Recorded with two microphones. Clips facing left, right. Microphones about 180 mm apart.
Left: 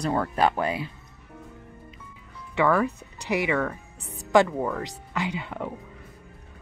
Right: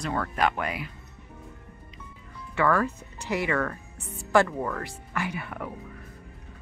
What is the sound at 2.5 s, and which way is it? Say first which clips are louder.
Speech: left 2 dB; 15° left (ahead or behind).